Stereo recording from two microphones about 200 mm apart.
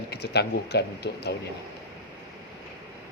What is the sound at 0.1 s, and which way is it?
A man's voice, 55° left (ahead or behind).